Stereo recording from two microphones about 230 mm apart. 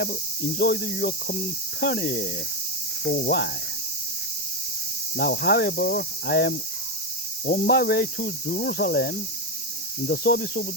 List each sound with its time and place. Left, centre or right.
0.6 s speech: left
5.1 s speech: left